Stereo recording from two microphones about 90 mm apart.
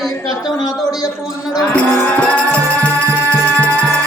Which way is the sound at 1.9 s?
20° left (ahead or behind).